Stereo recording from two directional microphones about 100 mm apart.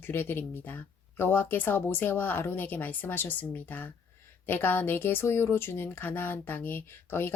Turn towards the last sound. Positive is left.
turn(degrees=20)  # may be behind; listen again after turning